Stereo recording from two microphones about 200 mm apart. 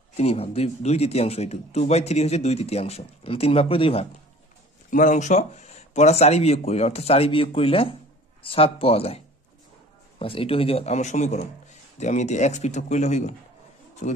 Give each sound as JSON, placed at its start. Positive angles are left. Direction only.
{"t": 0.2, "sound": "speech", "side_deg": 30}
{"t": 4.9, "sound": "a man's voice", "side_deg": 40}